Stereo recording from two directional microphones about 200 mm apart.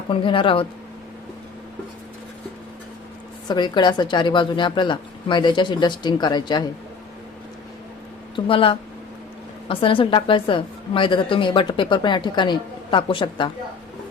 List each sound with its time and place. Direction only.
0.1 s a woman's voice: 25° left (ahead or behind)
3.5 s a woman's voice: 20° left (ahead or behind)
8.4 s a woman's voice: 25° left (ahead or behind)